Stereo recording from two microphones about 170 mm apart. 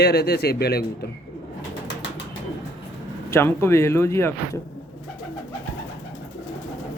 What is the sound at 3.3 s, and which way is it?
Speech, 15° left (ahead or behind).